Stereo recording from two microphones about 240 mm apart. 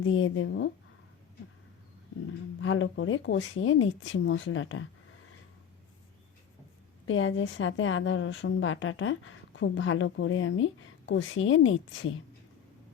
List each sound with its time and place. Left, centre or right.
0.0 s a woman's voice: left
2.6 s a woman's voice: left
7.0 s a woman's voice: left